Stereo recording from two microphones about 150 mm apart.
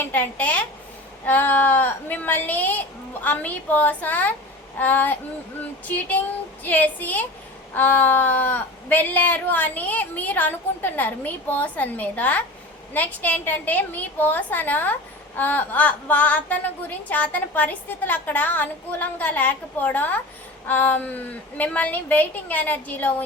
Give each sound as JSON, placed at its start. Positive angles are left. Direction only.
{"t": 0.0, "sound": "a woman's voice", "side_deg": 10}